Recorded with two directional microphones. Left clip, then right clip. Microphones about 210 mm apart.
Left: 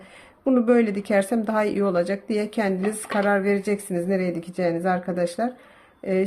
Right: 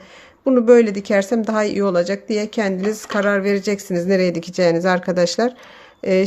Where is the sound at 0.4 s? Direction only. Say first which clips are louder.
Right 7 dB; 20° right (ahead or behind).